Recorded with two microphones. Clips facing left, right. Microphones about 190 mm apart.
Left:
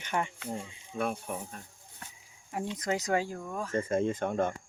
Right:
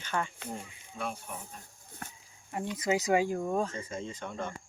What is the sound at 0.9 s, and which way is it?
Speech, 55° left (ahead or behind).